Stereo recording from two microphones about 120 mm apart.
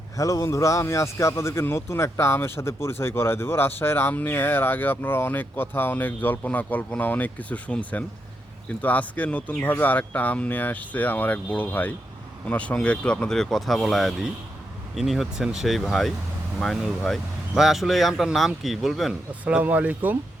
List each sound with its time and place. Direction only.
0.2 s a man's voice: 25° left (ahead or behind); by 19.1 s centre (ahead or behind)
19.3 s speech: 10° right (ahead or behind)